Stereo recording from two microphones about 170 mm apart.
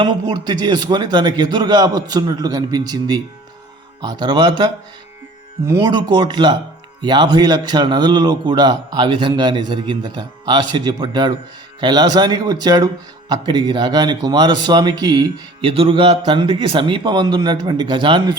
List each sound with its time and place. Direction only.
0.0 s speech: 25° right (ahead or behind)